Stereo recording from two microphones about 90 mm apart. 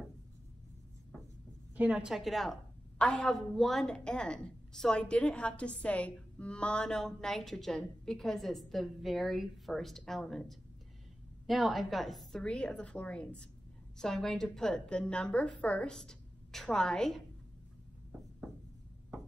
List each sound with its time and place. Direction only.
1.8 s a woman's voice: 15° right (ahead or behind)
2.1 s a woman's voice: centre (ahead or behind)